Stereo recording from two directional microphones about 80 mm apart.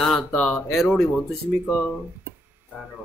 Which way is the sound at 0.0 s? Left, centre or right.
Centre.